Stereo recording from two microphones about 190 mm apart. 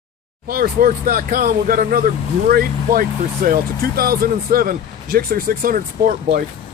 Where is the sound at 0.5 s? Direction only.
50° right (ahead or behind).